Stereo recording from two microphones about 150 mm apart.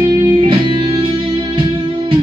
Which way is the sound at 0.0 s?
30° right (ahead or behind).